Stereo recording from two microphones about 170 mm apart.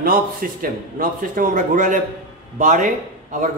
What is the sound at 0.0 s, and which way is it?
A man's voice, 55° right (ahead or behind).